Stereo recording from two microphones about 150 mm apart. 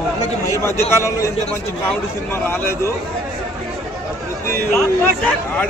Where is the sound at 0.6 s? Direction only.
15° left (ahead or behind).